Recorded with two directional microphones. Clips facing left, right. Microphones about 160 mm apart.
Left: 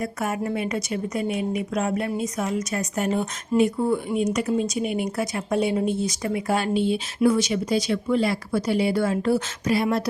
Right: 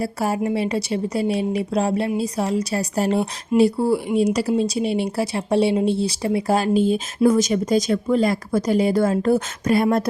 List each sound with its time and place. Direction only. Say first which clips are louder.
0.0 s speech: right 4 dB; 30° right (ahead or behind); by 10.0 s 50° right (ahead or behind)